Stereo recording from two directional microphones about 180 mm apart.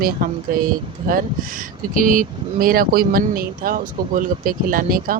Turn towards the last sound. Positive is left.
turn(degrees=-50)  # may be behind; listen again after turning